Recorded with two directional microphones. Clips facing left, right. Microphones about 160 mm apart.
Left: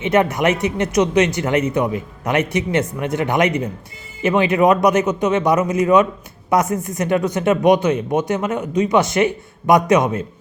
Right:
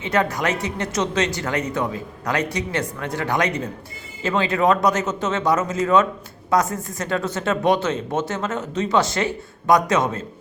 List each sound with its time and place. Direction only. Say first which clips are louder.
0.0 s speech: left 5 dB; 20° left (ahead or behind)